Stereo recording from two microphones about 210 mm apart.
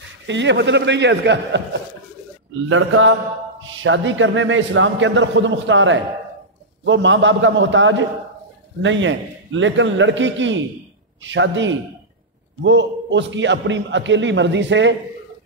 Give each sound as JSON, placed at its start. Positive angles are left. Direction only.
{"t": 0.3, "sound": "a man's voice", "side_deg": -60}
{"t": 2.7, "sound": "mantra", "side_deg": -70}
{"t": 3.6, "sound": "a man's voice", "side_deg": -65}